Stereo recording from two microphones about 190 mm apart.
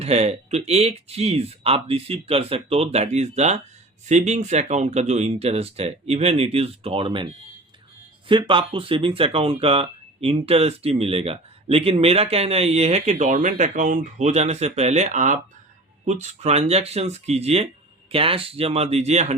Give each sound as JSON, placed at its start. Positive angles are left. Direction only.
{"t": 0.0, "sound": "speech", "side_deg": -35}
{"t": 8.3, "sound": "speech", "side_deg": -25}